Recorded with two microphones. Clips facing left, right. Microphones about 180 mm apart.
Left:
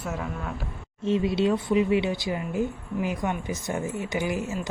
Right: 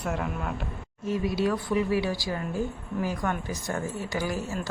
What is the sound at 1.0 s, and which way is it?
Speech, 25° left (ahead or behind).